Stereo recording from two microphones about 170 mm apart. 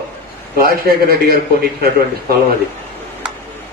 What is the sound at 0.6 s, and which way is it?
A man's voice, 60° right (ahead or behind).